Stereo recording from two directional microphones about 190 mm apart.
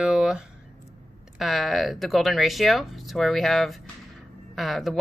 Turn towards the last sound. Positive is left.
turn(degrees=0)  # may be behind; listen again after turning